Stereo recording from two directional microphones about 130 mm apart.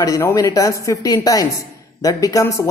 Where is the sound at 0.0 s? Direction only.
25° left (ahead or behind).